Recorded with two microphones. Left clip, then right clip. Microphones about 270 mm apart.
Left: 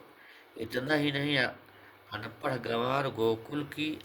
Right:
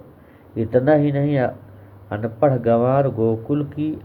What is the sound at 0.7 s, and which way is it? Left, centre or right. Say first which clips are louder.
Speech: right 13 dB; left.